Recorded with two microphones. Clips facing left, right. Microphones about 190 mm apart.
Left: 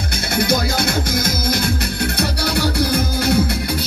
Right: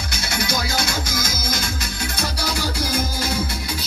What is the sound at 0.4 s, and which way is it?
Music, 60° left (ahead or behind).